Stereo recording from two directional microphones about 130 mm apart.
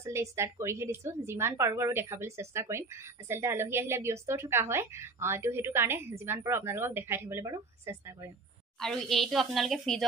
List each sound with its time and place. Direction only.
0.0 s a woman's voice: 20° right (ahead or behind)
8.7 s a woman's voice: 5° left (ahead or behind)